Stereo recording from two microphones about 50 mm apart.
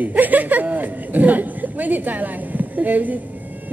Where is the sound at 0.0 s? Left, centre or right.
Right.